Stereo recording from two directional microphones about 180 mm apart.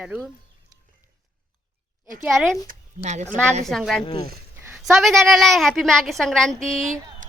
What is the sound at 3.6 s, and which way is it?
Speech, centre (ahead or behind).